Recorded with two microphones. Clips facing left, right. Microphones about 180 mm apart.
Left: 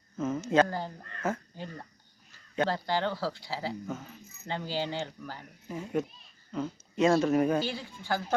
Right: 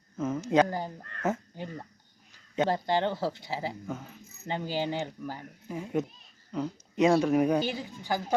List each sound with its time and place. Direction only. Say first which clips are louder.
0.2 s a woman's voice: right 1 dB; 10° right (ahead or behind)